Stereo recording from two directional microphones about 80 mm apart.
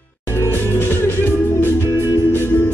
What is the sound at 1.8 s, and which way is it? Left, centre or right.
Music, right.